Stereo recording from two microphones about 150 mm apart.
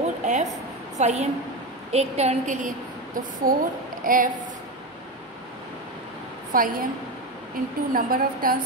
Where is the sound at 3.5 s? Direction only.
70° right (ahead or behind).